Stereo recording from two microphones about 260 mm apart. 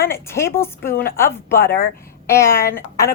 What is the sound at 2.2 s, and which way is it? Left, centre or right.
Speech, centre.